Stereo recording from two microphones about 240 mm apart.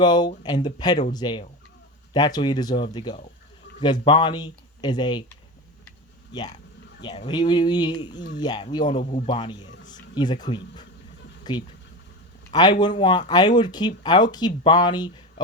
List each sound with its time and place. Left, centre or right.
0.0 s speech: centre
7.0 s a man's voice: centre